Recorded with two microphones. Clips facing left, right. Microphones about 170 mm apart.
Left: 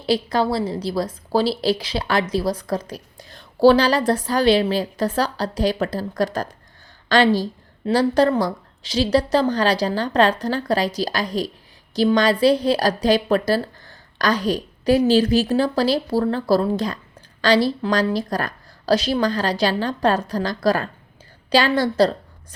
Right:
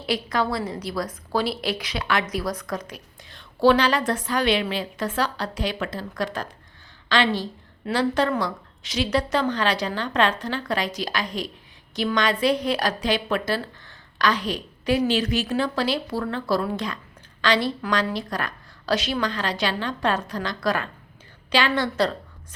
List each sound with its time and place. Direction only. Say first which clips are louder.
0.0 s a woman's voice: left 5 dB; 30° left (ahead or behind)